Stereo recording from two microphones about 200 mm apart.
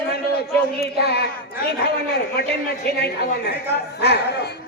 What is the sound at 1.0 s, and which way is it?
Speech, 55° left (ahead or behind).